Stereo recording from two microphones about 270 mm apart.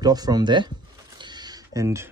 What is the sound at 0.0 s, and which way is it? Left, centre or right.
Speech, centre.